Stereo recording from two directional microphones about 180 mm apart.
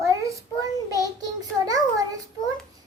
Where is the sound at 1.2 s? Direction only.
20° right (ahead or behind).